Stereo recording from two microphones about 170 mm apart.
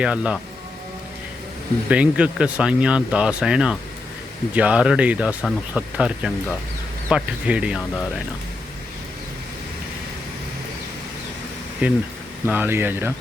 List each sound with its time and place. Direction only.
0.0 s speech: 5° right (ahead or behind)
1.9 s speech: 5° right (ahead or behind)
11.8 s speech: 10° right (ahead or behind)